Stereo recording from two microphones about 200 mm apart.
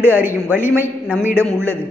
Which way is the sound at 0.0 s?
10° right (ahead or behind).